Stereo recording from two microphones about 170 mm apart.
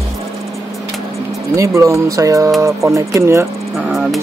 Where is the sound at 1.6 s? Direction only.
20° right (ahead or behind).